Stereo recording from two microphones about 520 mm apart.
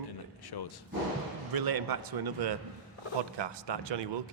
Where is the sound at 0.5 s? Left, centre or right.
Left.